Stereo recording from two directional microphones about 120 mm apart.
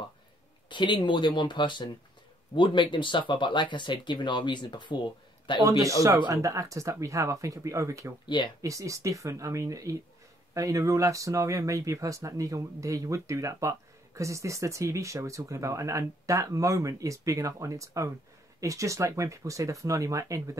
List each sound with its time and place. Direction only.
0.7 s speech: 40° left (ahead or behind)
5.6 s speech: 25° right (ahead or behind)